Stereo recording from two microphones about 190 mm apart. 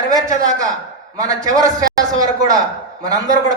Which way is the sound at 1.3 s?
20° right (ahead or behind).